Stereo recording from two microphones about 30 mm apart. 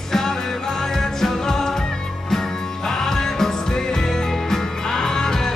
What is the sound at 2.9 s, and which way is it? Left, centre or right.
Music, centre.